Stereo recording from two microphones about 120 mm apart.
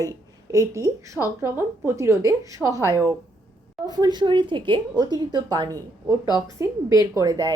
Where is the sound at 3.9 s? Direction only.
35° right (ahead or behind).